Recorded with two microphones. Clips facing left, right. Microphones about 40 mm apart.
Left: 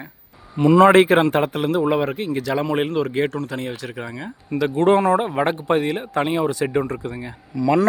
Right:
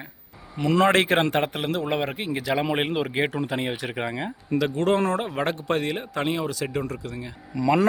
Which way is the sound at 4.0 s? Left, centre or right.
Right.